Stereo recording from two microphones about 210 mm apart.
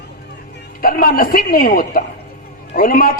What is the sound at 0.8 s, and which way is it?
Speech, 45° left (ahead or behind).